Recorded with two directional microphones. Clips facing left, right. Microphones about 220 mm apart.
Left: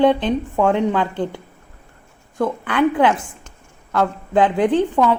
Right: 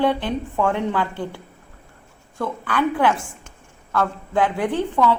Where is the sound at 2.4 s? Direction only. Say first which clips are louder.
Left 5 dB; 20° left (ahead or behind).